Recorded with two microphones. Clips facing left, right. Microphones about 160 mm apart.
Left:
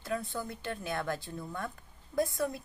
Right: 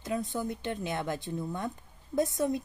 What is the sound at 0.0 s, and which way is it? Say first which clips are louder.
Speech: right 3 dB; 20° right (ahead or behind).